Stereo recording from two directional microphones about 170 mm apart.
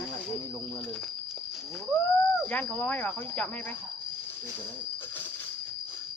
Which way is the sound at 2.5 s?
10° left (ahead or behind).